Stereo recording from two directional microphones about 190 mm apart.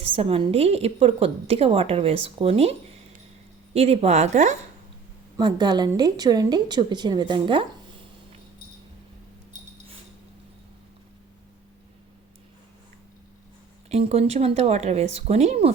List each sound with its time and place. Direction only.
0.1 s a woman's voice: 30° right (ahead or behind)
3.8 s a woman's voice: 35° right (ahead or behind)
5.4 s a woman's voice: 25° right (ahead or behind)
13.9 s a woman's voice: 30° right (ahead or behind)